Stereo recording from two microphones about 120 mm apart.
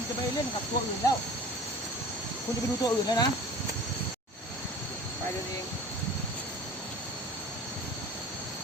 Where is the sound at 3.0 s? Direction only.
35° left (ahead or behind).